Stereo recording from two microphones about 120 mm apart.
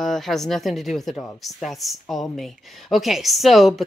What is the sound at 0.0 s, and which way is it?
Speech, centre (ahead or behind).